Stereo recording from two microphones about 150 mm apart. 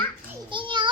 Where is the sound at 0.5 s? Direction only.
35° right (ahead or behind).